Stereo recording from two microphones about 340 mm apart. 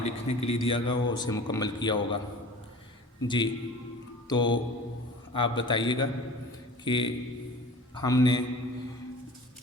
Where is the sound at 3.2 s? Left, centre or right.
Centre.